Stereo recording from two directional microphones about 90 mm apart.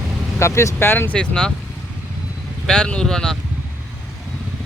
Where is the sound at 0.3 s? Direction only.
30° left (ahead or behind); by 1.5 s 10° left (ahead or behind).